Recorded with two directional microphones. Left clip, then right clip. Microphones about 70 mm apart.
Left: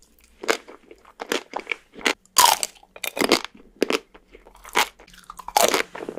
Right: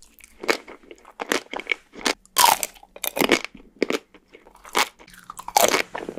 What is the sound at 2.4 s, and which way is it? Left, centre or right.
Crunch, right.